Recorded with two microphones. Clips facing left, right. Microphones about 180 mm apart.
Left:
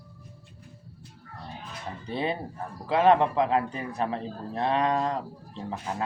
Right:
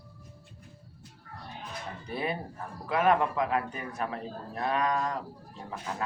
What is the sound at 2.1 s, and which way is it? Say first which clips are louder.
A man's voice: left 3 dB; 25° left (ahead or behind).